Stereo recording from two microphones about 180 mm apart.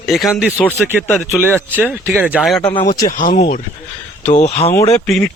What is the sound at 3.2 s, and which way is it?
Speech, 55° left (ahead or behind).